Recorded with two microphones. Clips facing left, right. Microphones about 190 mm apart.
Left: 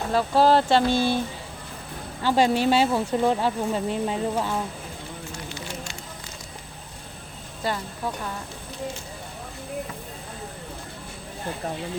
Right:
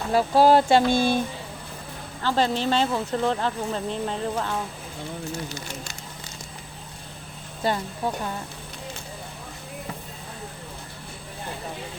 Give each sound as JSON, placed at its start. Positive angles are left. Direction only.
{"t": 0.1, "sound": "speech", "side_deg": -10}
{"t": 2.2, "sound": "speech", "side_deg": 10}
{"t": 5.5, "sound": "a sound", "side_deg": -40}
{"t": 8.0, "sound": "speech", "side_deg": -25}